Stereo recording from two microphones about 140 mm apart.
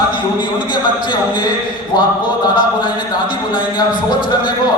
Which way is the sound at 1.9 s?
30° left (ahead or behind).